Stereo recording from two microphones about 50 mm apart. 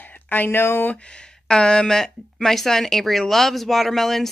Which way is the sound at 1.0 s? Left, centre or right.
Centre.